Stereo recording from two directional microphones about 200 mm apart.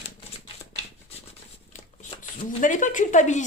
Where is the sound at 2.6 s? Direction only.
40° left (ahead or behind).